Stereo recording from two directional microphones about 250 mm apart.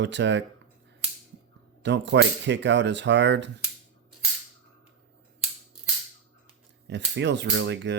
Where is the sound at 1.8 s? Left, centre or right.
Right.